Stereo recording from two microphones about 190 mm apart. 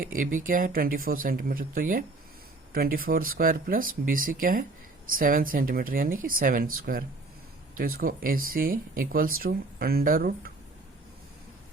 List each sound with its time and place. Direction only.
0.0 s speech: 45° right (ahead or behind)